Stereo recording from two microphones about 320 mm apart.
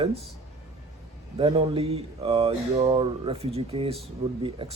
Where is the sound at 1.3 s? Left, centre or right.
Centre.